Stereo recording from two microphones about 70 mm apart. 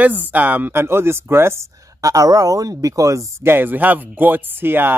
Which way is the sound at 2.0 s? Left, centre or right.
Right.